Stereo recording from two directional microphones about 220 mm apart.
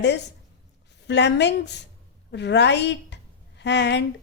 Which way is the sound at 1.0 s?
50° left (ahead or behind).